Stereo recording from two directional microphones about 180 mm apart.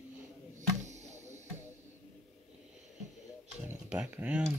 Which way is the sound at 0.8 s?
40° right (ahead or behind).